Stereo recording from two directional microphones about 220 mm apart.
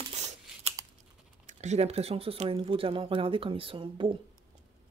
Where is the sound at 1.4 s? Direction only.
30° right (ahead or behind).